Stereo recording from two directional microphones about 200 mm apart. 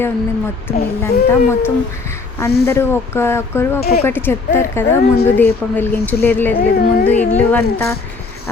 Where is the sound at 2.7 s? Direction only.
10° left (ahead or behind).